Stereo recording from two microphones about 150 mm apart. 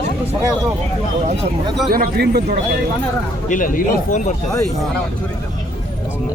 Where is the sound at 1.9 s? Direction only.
80° right.